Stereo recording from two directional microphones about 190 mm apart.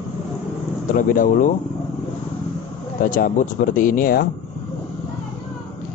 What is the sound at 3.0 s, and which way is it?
Speech, 45° left (ahead or behind).